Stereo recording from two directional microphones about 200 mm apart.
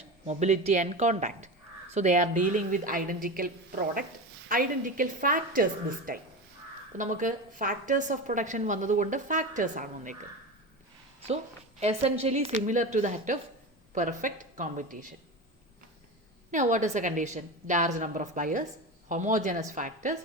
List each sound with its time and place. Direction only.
0.3 s a woman's voice: 35° right (ahead or behind)
11.8 s a woman's voice: 30° right (ahead or behind)
16.5 s a woman's voice: 40° right (ahead or behind)